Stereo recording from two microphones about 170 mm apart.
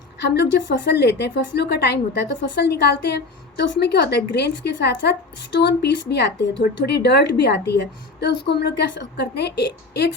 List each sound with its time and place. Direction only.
0.2 s a woman's voice: 80° left